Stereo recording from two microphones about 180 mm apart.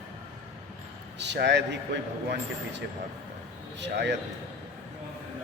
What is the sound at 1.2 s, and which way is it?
Speech, 75° right (ahead or behind).